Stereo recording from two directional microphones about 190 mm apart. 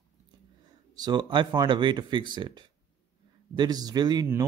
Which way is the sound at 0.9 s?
20° right (ahead or behind).